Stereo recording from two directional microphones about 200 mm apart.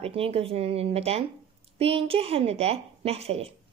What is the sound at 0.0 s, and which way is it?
A woman's voice, 30° right (ahead or behind).